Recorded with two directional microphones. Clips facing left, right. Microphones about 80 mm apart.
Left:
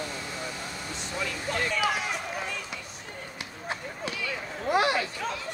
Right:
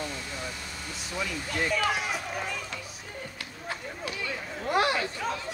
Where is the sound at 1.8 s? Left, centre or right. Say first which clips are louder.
Even; centre.